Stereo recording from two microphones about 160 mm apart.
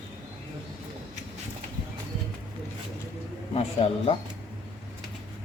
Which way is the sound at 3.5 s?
40° left (ahead or behind).